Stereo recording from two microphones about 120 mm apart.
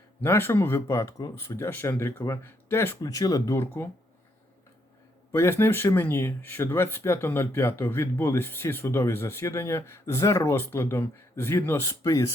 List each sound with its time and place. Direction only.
0.2 s speech: 20° left (ahead or behind)
3.0 s speech: 30° left (ahead or behind)
5.3 s speech: 20° left (ahead or behind)